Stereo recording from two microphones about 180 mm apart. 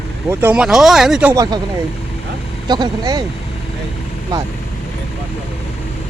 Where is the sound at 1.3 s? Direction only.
20° right (ahead or behind).